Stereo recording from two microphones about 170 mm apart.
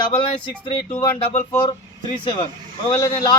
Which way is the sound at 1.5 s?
25° left (ahead or behind).